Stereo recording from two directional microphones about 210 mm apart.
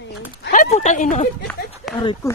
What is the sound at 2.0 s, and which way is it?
Speech, 20° left (ahead or behind).